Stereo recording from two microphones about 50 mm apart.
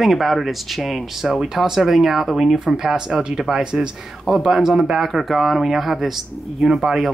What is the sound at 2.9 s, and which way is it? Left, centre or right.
Speech, centre.